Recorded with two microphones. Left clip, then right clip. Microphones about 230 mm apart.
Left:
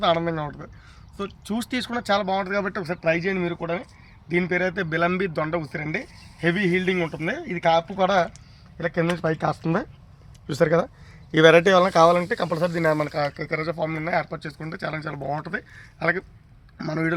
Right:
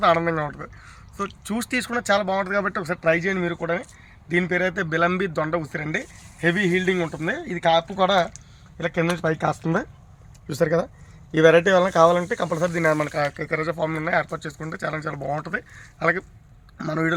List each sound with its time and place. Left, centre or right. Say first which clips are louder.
0.0 s a man's voice: right 3 dB; centre